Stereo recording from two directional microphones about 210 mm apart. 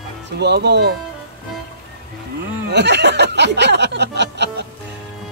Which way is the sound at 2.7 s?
55° right (ahead or behind).